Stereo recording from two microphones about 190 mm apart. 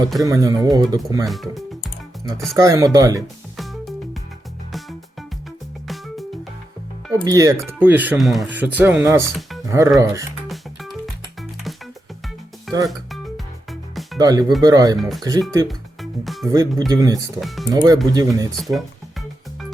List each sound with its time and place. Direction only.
0.2 s speech: 15° right (ahead or behind)
1.2 s speech: centre (ahead or behind)
2.6 s speech: 15° right (ahead or behind)
3.6 s music: centre (ahead or behind)
7.1 s speech: 20° right (ahead or behind)
10.5 s music: centre (ahead or behind)
12.7 s music: centre (ahead or behind)
14.2 s speech: 20° right (ahead or behind)
16.2 s speech: centre (ahead or behind)
16.5 s speech: 20° right (ahead or behind)
17.4 s speech: centre (ahead or behind)
17.7 s speech: 20° right (ahead or behind)